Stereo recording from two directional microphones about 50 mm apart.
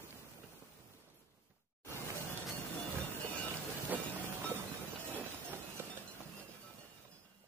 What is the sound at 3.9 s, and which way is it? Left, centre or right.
Vehicle, right.